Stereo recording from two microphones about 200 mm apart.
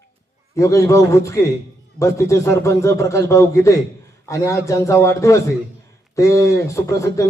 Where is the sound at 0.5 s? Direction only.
15° left (ahead or behind).